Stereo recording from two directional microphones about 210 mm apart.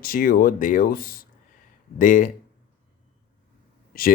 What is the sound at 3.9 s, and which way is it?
Speech, 40° left (ahead or behind).